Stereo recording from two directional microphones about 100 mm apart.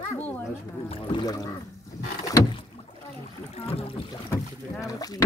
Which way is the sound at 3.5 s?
80° left.